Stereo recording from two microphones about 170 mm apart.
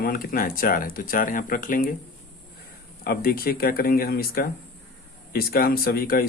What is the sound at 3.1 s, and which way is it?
Speech, 60° left (ahead or behind).